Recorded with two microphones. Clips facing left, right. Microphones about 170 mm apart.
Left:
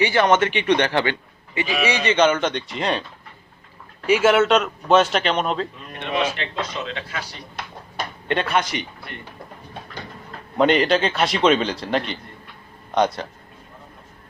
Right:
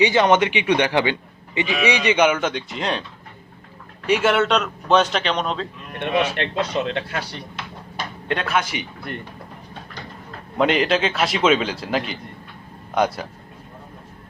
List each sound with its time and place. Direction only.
0.0 s speech: 15° right (ahead or behind); by 3.0 s centre (ahead or behind)
4.0 s a man's voice: 5° left (ahead or behind)
6.0 s speech: 60° right (ahead or behind)
8.3 s a man's voice: centre (ahead or behind)
10.6 s a man's voice: centre (ahead or behind)